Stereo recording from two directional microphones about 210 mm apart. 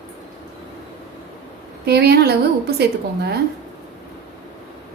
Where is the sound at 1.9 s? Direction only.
50° right (ahead or behind).